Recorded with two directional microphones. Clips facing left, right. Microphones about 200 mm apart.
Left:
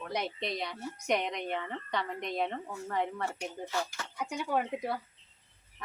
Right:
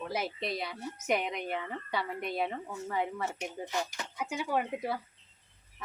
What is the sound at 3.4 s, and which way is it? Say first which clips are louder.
Speech: even; 20° right (ahead or behind).